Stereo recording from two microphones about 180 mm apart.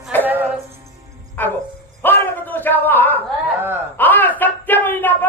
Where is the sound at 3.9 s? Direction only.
10° left (ahead or behind).